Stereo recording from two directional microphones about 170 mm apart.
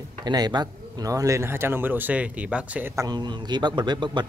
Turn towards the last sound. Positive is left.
turn(degrees=-25)  # may be behind; listen again after turning